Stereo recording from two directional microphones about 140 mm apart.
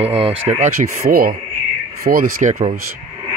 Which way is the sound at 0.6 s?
90° right.